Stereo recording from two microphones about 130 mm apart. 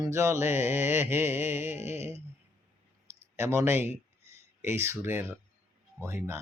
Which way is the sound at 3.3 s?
20° right (ahead or behind).